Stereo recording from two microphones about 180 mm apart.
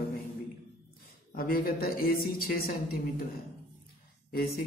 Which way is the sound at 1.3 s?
55° left (ahead or behind).